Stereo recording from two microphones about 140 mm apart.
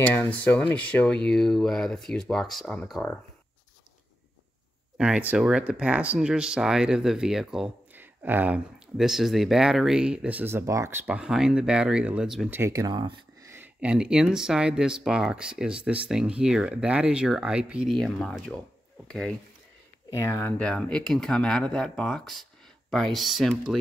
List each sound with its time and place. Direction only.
0.0 s speech: 10° left (ahead or behind)
4.9 s speech: 10° right (ahead or behind)
11.1 s speech: 5° right (ahead or behind)
12.4 s speech: 15° right (ahead or behind)
13.5 s speech: 10° right (ahead or behind)